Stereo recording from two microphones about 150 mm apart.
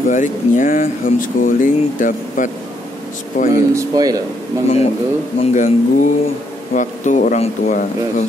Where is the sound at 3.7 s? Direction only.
25° right (ahead or behind).